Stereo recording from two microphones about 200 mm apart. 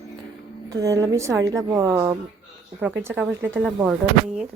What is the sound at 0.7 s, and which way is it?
A woman's voice, 15° right (ahead or behind).